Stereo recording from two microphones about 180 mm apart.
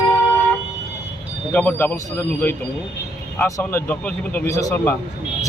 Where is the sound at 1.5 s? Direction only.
10° left (ahead or behind).